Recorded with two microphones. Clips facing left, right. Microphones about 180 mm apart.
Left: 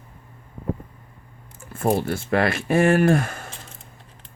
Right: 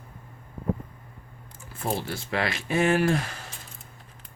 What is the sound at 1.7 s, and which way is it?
Speech, 50° left (ahead or behind).